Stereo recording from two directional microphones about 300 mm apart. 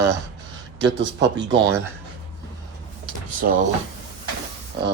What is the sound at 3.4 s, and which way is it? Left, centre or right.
Speech, right.